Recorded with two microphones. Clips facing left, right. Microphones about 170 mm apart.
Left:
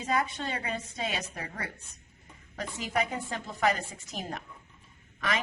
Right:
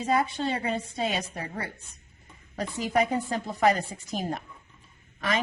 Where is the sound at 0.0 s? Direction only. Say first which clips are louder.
Right 5 dB; 30° right (ahead or behind).